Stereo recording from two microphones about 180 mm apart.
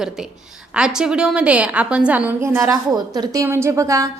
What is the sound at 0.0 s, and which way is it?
A woman's voice, centre (ahead or behind).